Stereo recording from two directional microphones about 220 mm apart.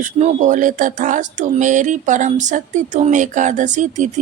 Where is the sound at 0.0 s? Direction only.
35° right (ahead or behind).